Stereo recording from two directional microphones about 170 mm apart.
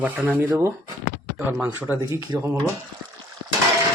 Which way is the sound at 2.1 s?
20° right (ahead or behind).